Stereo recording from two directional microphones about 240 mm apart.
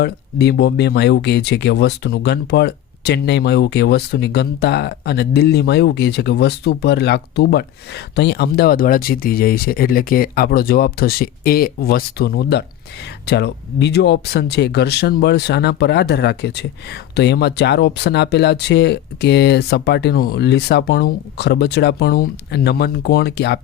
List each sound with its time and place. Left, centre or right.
0.0 s speech: left